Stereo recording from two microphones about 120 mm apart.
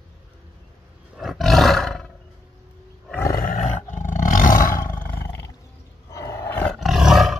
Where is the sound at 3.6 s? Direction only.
90° left.